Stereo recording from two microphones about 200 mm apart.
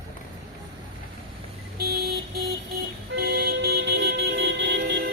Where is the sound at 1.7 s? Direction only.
50° right (ahead or behind).